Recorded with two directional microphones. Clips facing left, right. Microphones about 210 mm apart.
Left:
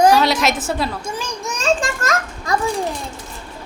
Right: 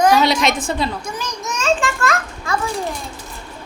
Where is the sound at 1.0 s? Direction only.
30° left (ahead or behind).